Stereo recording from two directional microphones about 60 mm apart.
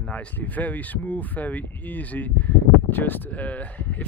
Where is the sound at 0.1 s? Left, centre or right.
Left.